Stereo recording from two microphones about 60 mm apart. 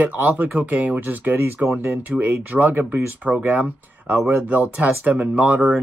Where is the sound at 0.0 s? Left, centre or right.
Right.